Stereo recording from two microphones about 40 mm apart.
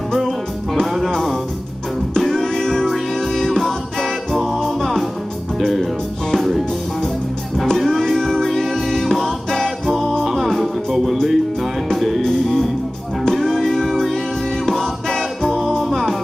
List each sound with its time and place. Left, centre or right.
0.8 s music: centre
2.1 s music: centre
6.3 s music: centre
7.7 s music: centre
12.2 s music: centre
15.8 s music: centre